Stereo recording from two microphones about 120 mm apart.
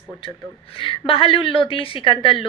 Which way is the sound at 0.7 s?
50° left (ahead or behind).